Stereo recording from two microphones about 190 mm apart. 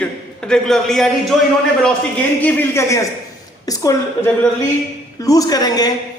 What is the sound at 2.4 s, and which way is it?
A woman's voice, 10° left (ahead or behind).